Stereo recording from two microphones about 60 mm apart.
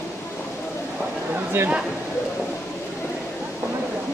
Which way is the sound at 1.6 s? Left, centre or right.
Right.